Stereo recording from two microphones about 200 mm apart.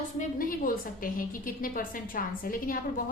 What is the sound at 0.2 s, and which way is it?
A woman's voice, 45° left (ahead or behind).